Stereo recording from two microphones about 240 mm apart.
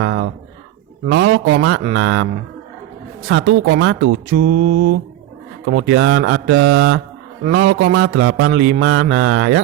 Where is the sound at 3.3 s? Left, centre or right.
Right.